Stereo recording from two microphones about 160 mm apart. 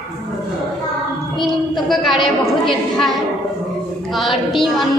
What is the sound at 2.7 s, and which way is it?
A man's voice, centre (ahead or behind).